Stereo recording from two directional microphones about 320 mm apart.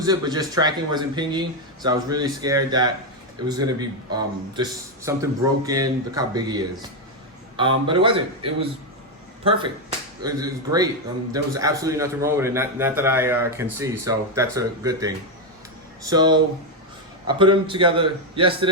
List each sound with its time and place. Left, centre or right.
0.0 s a man's voice: centre
10.2 s a man's voice: centre